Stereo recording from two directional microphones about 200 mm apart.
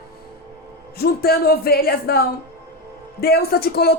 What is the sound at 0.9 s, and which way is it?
Speech, 50° left (ahead or behind).